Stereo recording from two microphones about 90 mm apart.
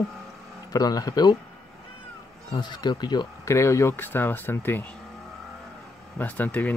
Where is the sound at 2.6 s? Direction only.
55° left (ahead or behind).